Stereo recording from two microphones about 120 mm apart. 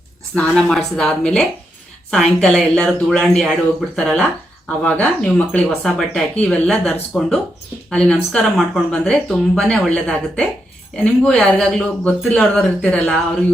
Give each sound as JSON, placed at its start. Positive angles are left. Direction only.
{"t": 0.3, "sound": "speech", "side_deg": 5}